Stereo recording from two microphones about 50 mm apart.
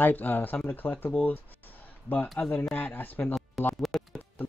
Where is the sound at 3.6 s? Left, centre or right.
Centre.